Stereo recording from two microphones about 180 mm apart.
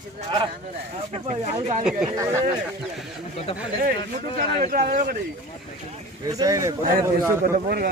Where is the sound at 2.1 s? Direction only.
15° right (ahead or behind).